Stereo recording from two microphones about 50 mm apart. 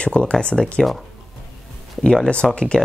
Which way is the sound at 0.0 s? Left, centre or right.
Left.